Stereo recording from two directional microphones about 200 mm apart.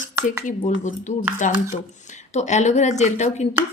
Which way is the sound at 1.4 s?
40° left (ahead or behind).